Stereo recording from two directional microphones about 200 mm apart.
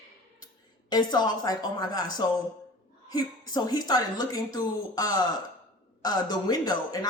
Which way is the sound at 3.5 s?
20° left (ahead or behind).